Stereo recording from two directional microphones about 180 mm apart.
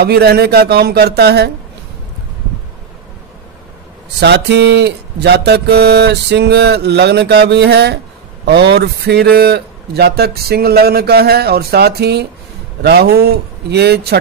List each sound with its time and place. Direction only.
0.0 s a man's voice: 60° right (ahead or behind)
4.2 s mantra: 70° right (ahead or behind)
8.5 s a man's voice: 65° right (ahead or behind)